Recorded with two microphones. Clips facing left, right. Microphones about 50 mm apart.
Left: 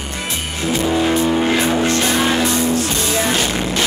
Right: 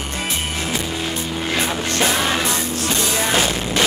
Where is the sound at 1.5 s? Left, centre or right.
Centre.